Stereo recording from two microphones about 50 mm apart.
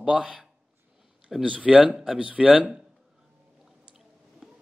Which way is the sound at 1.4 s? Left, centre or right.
Right.